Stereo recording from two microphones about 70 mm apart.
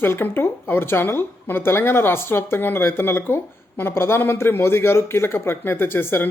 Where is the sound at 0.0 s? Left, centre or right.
Left.